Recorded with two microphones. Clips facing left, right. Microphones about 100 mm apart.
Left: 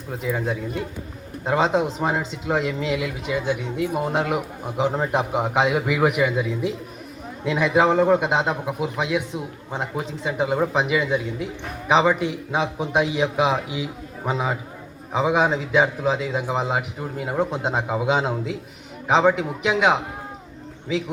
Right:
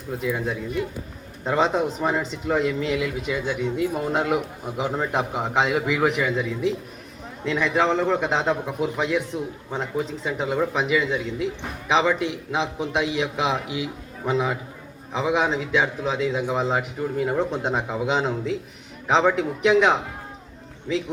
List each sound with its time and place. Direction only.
0.3 s a man's voice: 25° left (ahead or behind)
1.5 s a man's voice: 10° left (ahead or behind)
4.8 s a man's voice: 15° left (ahead or behind)
15.8 s a man's voice: 30° left (ahead or behind)
16.5 s a man's voice: 10° left (ahead or behind)
17.7 s a man's voice: 25° left (ahead or behind); by 20.0 s 5° left (ahead or behind)